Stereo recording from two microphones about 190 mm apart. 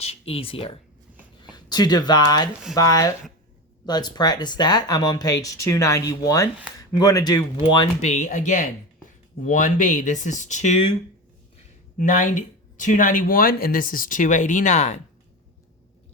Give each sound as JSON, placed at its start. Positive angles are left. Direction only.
{"t": 0.0, "sound": "speech", "side_deg": 30}
{"t": 8.0, "sound": "speech", "side_deg": 40}
{"t": 11.9, "sound": "speech", "side_deg": 45}